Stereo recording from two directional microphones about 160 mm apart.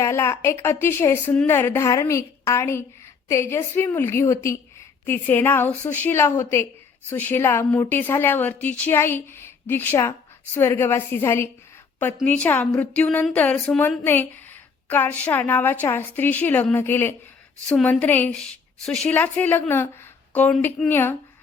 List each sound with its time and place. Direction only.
0.0 s a woman's voice: 15° left (ahead or behind)